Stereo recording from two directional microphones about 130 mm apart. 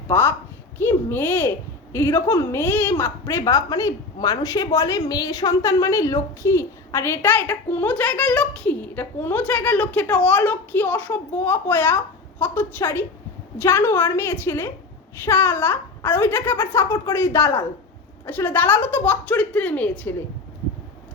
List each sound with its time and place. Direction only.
0.1 s a woman's voice: 15° left (ahead or behind)